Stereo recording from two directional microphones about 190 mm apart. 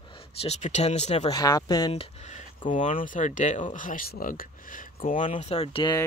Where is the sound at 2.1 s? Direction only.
35° left (ahead or behind).